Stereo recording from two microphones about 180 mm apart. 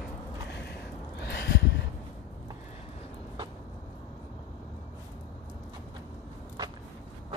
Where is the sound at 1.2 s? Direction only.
65° left (ahead or behind).